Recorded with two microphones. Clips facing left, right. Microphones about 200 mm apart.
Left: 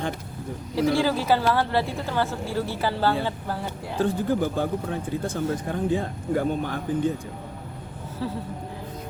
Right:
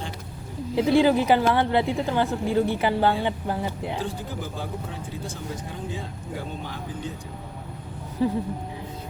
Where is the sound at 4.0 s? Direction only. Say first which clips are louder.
Left 8 dB; 55° left (ahead or behind).